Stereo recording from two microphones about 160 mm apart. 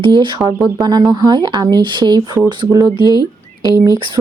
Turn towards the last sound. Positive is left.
turn(degrees=-20)  # may be behind; listen again after turning